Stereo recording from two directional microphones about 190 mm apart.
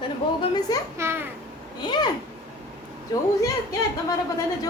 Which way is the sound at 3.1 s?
20° left (ahead or behind).